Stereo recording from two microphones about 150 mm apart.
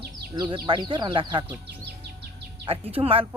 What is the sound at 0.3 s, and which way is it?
Speech, 30° right (ahead or behind).